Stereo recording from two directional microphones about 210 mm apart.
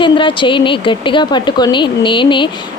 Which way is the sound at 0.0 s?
25° left (ahead or behind).